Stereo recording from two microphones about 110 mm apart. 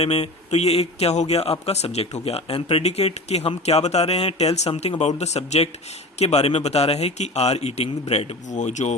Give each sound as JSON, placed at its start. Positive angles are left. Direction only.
{"t": 0.0, "sound": "a man's voice", "side_deg": 70}